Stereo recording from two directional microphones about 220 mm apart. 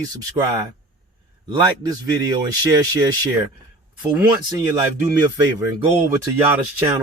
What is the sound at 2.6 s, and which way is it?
Speech, 15° right (ahead or behind).